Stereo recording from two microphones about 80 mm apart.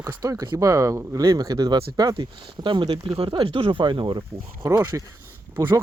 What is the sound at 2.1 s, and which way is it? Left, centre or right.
Speech, right.